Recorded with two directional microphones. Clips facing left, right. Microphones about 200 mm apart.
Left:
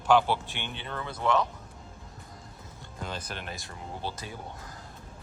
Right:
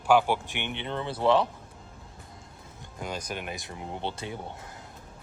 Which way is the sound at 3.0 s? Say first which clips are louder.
Right 3 dB; 10° right (ahead or behind).